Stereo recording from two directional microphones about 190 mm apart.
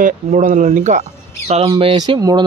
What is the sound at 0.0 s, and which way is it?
Speech, 40° right (ahead or behind).